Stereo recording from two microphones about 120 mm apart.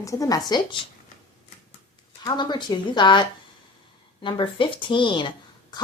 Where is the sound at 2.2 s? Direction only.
40° left (ahead or behind).